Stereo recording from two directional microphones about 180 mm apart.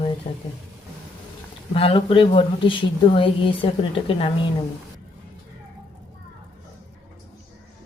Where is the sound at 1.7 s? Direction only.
35° left (ahead or behind).